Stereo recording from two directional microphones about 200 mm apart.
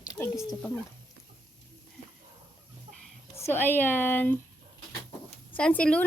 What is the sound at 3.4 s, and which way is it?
Speech, 10° left (ahead or behind).